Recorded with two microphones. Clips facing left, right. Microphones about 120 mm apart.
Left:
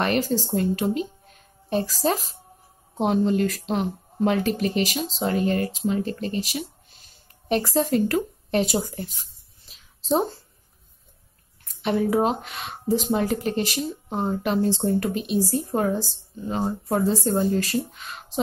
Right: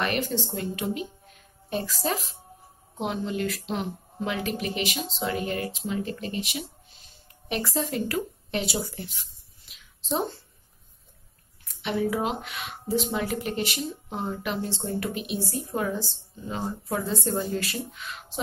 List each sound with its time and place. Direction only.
0.0 s speech: 35° left (ahead or behind)
11.8 s speech: 40° left (ahead or behind)